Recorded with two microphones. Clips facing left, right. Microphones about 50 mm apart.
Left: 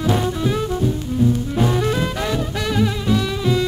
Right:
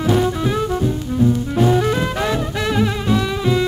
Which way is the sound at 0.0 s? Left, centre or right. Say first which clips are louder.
Right 2 dB; centre.